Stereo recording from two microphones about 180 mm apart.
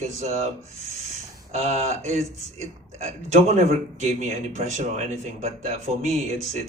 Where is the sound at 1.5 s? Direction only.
40° right (ahead or behind).